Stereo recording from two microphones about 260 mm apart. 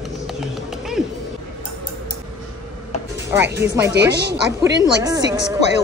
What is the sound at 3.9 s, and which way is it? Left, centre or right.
Speech, right.